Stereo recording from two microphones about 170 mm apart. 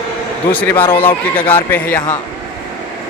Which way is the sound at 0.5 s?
10° left (ahead or behind).